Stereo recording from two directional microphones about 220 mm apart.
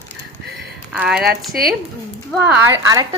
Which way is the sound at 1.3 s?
40° right (ahead or behind).